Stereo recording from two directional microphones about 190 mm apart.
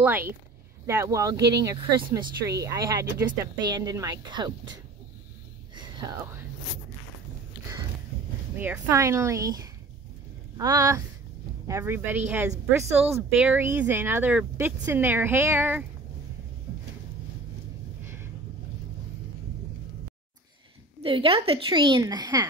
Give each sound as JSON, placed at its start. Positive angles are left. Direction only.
{"t": 0.8, "sound": "a woman's voice", "side_deg": -15}
{"t": 8.5, "sound": "speech", "side_deg": -10}
{"t": 18.0, "sound": "a sound", "side_deg": -15}
{"t": 21.0, "sound": "a woman's voice", "side_deg": -30}